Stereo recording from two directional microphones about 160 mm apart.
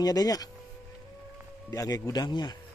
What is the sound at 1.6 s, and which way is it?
Speech, 20° left (ahead or behind).